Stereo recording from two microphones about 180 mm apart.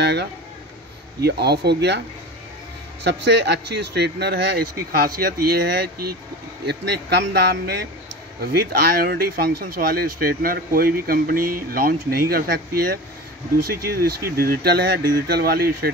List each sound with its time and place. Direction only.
0.0 s speech: 65° right (ahead or behind)
3.0 s speech: 70° right (ahead or behind)
6.6 s speech: 65° right (ahead or behind)
14.0 s speech: 55° right (ahead or behind)